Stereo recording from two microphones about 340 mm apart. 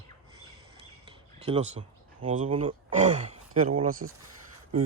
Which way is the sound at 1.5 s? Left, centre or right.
Centre.